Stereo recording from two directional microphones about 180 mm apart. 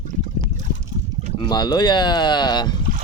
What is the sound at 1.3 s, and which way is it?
Speech, 25° left (ahead or behind).